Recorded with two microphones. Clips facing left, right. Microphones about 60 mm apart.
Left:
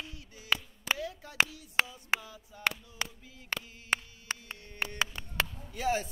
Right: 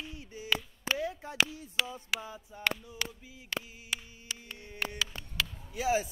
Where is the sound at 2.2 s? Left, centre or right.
Right.